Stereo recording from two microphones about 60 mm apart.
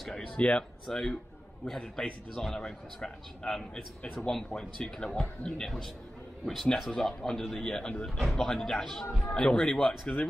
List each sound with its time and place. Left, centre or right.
0.4 s speech: left
0.8 s a man's voice: centre